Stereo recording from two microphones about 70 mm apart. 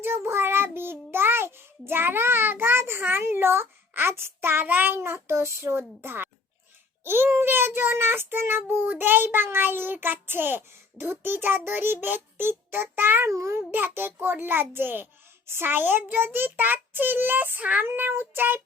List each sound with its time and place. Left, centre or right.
0.0 s child singing: right
4.9 s child singing: right
13.3 s a child's voice: right
13.7 s child singing: right
15.4 s a child's voice: right